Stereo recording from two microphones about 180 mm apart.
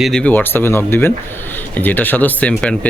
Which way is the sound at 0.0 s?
5° left (ahead or behind).